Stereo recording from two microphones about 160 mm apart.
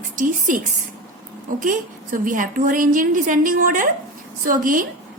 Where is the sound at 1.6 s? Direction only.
55° right (ahead or behind).